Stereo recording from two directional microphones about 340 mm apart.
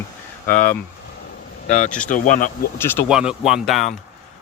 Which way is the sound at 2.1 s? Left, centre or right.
Left.